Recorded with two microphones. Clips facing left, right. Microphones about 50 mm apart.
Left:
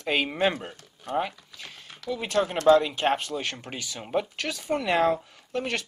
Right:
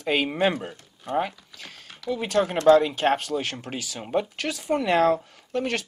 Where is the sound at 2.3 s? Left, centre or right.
Right.